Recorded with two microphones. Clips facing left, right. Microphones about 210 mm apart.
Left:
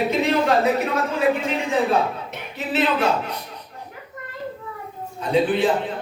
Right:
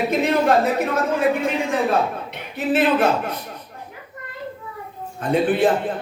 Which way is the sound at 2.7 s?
50° right (ahead or behind).